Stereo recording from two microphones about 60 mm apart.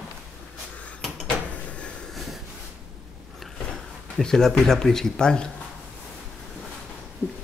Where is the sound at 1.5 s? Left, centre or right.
Centre.